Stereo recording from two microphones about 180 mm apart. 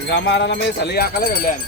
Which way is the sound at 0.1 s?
75° left (ahead or behind).